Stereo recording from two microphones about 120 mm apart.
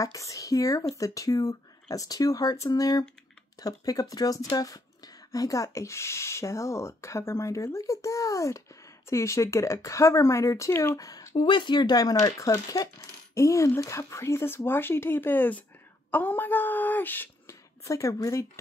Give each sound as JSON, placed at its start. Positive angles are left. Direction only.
{"t": 0.0, "sound": "speech", "side_deg": 25}